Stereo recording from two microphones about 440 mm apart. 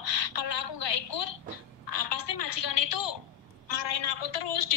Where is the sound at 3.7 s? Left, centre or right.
Left.